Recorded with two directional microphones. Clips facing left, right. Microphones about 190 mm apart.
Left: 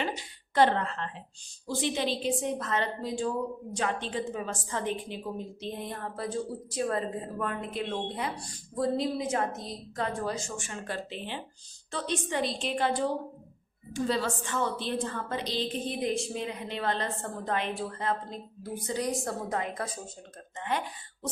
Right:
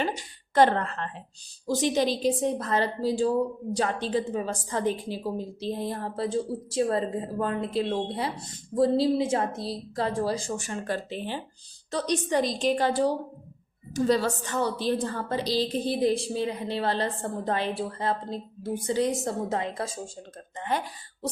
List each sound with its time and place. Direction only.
0.0 s a woman's voice: 45° right (ahead or behind)